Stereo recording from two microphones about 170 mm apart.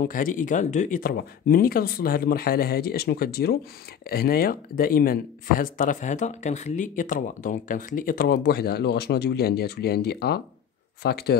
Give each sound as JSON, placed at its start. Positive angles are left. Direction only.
{"t": 0.0, "sound": "speech", "side_deg": 55}
{"t": 1.1, "sound": "speech", "side_deg": 60}